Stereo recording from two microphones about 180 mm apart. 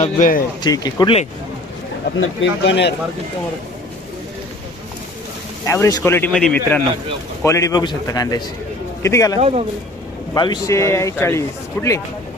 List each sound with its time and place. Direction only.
0.0 s speech: 45° left (ahead or behind)
0.6 s a man's voice: 20° left (ahead or behind)
2.1 s speech: 85° left
5.6 s a man's voice: 15° left (ahead or behind)
9.4 s a man's voice: 35° right (ahead or behind)
10.3 s speech: 25° left (ahead or behind)